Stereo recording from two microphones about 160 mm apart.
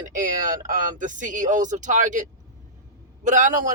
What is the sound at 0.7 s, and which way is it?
Speech, 55° right (ahead or behind).